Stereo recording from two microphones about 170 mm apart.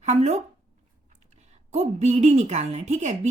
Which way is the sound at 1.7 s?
40° right (ahead or behind).